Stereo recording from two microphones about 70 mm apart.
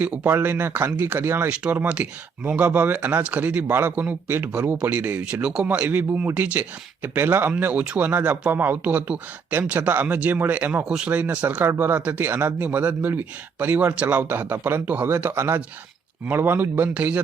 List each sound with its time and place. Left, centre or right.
0.0 s speech: centre
0.3 s speech: right
1.7 s speech: right
4.7 s speech: right
5.2 s speech: centre
7.2 s speech: right